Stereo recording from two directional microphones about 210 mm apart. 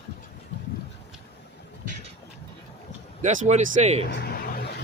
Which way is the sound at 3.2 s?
35° right (ahead or behind).